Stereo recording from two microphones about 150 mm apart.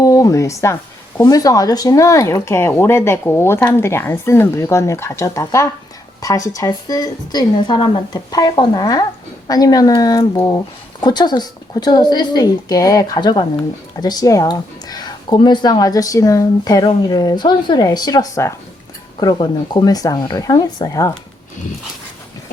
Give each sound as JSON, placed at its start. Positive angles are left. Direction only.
{"t": 0.0, "sound": "speech", "side_deg": 20}